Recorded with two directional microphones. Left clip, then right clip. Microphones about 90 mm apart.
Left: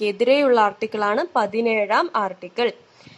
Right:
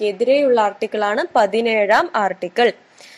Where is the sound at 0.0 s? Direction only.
25° left (ahead or behind).